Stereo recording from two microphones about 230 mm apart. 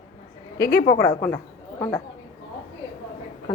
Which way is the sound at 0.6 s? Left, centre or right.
Left.